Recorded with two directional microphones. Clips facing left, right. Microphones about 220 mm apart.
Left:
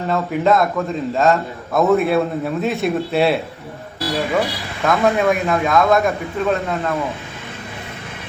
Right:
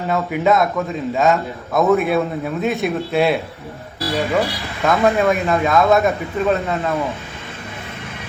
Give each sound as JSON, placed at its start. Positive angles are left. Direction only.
{"t": 0.1, "sound": "a man's voice", "side_deg": 0}